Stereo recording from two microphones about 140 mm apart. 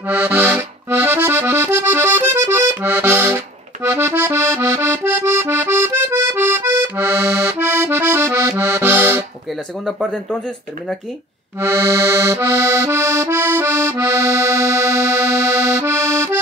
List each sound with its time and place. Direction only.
0.0 s accordion: 15° right (ahead or behind)
9.8 s speech: 5° right (ahead or behind)
11.6 s accordion: 20° right (ahead or behind)